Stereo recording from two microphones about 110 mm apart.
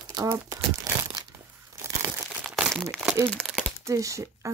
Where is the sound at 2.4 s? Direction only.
5° right (ahead or behind).